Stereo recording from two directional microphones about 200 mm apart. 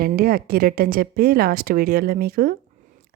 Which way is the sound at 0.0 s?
45° right (ahead or behind).